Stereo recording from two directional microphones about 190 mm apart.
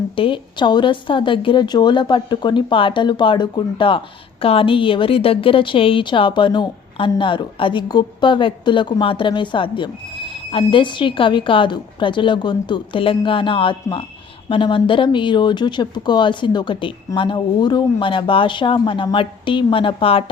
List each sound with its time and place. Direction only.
0.2 s speech: 25° left (ahead or behind)